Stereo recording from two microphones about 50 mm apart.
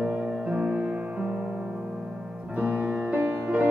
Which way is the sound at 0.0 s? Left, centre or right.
Right.